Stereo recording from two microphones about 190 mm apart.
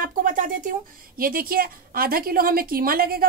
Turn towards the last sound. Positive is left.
turn(degrees=-50)  # may be behind; listen again after turning